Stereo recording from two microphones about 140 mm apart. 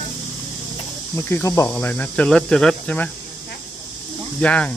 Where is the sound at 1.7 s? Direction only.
10° left (ahead or behind).